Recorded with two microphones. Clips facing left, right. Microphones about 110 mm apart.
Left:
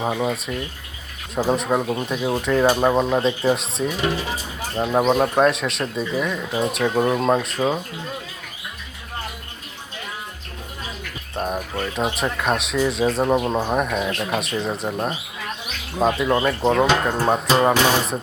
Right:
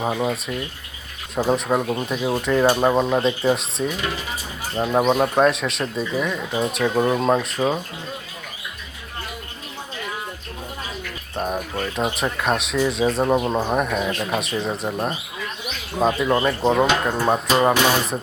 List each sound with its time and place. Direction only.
0.0 s speech: centre (ahead or behind)
4.0 s speech: 30° left (ahead or behind)
4.7 s speech: centre (ahead or behind)
11.3 s speech: centre (ahead or behind)